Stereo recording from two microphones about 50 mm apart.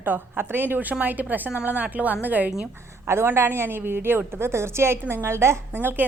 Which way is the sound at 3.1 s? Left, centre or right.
Right.